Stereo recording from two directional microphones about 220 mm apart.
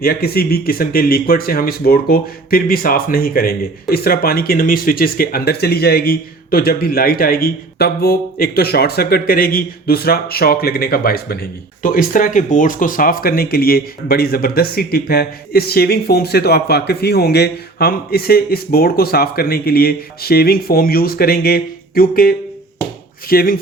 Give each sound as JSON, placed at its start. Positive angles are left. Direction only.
{"t": 0.0, "sound": "speech", "side_deg": 45}